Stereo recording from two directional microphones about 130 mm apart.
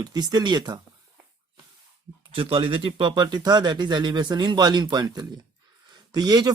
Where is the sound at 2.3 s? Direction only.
45° right (ahead or behind).